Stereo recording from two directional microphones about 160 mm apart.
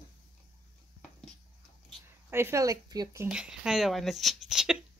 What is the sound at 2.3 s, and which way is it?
Speech, 15° right (ahead or behind).